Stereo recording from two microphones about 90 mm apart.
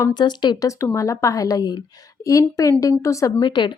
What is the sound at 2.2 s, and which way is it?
Speech, 35° left (ahead or behind).